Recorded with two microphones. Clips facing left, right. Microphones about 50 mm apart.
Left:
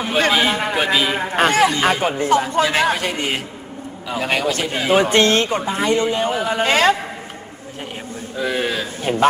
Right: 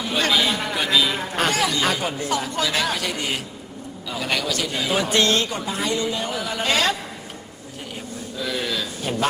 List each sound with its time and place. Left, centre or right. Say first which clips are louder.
0.0 s a man's voice: left 4 dB; left
8.4 s a man's voice: left 5 dB; left